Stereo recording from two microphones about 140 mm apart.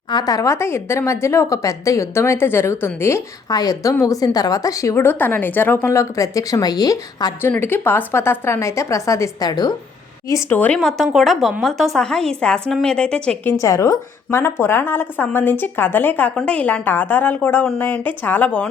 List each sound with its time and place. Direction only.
0.1 s a woman's voice: 30° left (ahead or behind)
7.4 s a woman's voice: 15° left (ahead or behind)
10.6 s a woman's voice: 5° left (ahead or behind)